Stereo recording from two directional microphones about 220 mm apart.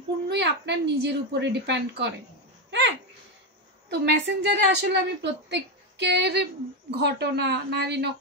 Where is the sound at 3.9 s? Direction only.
50° right (ahead or behind).